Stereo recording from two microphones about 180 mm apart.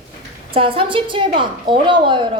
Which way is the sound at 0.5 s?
30° right (ahead or behind).